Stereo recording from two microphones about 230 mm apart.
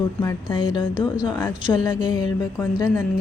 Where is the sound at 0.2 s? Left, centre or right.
Centre.